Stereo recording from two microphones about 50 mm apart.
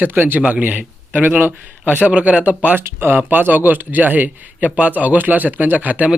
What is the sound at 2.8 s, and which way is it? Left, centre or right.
A man's voice, right.